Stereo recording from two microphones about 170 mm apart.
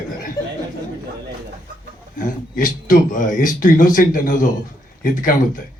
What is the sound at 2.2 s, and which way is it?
A man's voice, 55° left (ahead or behind).